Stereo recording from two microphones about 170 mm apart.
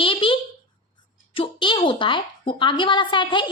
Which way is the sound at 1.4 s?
30° left (ahead or behind).